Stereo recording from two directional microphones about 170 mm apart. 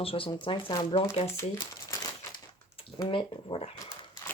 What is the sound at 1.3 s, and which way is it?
Speech, 20° left (ahead or behind).